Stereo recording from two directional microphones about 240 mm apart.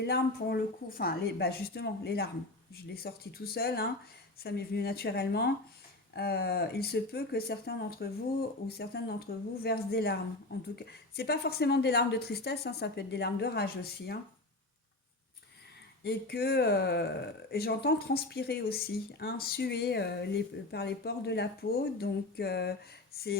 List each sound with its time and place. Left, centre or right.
0.0 s a woman's voice: left
16.0 s speech: left